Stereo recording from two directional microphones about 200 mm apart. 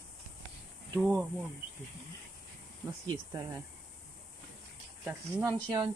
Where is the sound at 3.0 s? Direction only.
20° right (ahead or behind).